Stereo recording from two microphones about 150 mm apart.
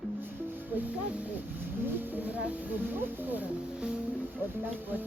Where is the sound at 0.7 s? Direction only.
10° right (ahead or behind).